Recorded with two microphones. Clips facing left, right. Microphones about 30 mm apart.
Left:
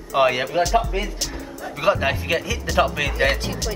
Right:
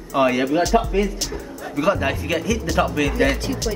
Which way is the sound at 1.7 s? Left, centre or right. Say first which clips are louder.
Even; centre.